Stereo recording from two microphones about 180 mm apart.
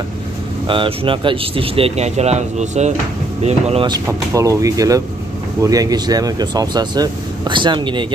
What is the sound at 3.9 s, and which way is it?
Speech, 15° right (ahead or behind).